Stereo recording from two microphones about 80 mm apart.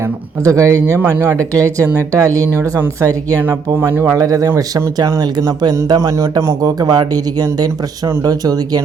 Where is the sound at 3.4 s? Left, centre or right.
Right.